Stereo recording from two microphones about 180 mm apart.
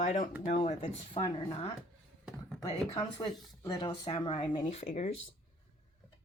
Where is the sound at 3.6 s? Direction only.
25° left (ahead or behind).